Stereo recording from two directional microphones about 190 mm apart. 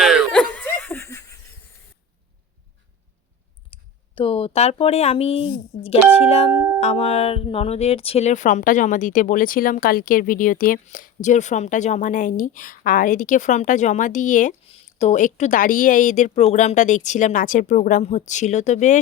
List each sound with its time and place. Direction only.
0.0 s laughter: centre (ahead or behind)
3.7 s speech: 30° left (ahead or behind)
14.6 s speech: 30° left (ahead or behind)